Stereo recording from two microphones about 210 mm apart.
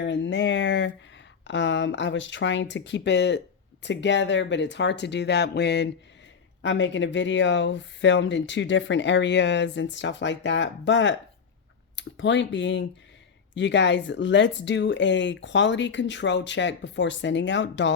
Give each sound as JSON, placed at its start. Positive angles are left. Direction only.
{"t": 0.0, "sound": "speech", "side_deg": 60}